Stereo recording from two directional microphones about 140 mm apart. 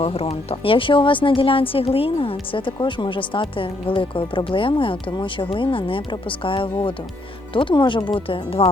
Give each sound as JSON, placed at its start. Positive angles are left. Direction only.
{"t": 0.0, "sound": "speech", "side_deg": 45}